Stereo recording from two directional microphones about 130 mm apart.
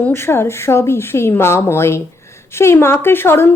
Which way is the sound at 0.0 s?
15° left (ahead or behind).